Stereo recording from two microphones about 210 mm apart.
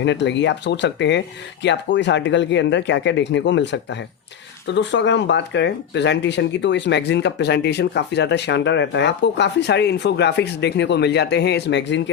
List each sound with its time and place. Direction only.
0.0 s speech: 55° left (ahead or behind)